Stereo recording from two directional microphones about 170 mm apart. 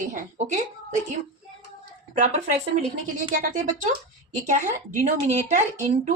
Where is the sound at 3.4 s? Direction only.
45° right (ahead or behind).